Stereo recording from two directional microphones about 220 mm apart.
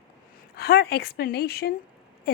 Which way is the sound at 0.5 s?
45° left (ahead or behind).